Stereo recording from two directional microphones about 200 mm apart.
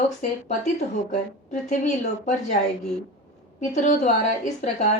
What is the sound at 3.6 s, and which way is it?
Speech, 35° left (ahead or behind).